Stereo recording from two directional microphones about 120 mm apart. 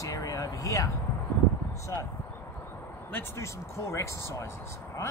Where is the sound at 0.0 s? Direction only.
30° left (ahead or behind).